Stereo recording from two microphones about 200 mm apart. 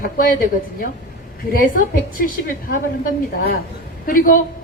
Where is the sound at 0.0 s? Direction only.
45° left (ahead or behind).